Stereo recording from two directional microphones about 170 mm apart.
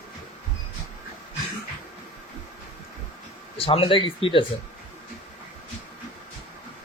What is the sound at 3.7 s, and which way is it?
Speech, 30° left (ahead or behind).